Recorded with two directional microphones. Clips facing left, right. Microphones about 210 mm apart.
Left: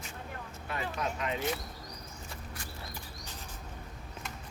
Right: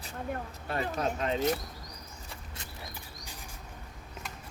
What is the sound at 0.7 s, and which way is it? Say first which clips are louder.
Speech: right 4 dB; 35° right (ahead or behind).